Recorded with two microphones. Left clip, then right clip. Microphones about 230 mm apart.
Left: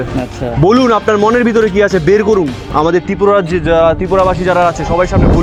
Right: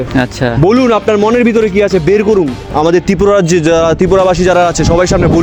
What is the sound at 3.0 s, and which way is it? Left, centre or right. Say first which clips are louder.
Speech: right 2 dB; right.